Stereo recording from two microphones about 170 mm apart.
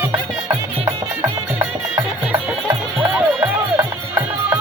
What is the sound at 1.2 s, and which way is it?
Music, 15° right (ahead or behind).